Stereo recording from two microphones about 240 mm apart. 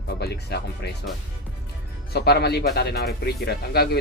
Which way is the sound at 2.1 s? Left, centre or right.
Left.